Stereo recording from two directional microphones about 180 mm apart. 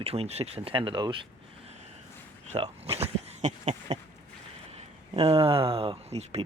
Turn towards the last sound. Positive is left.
turn(degrees=-35)  # may be behind; listen again after turning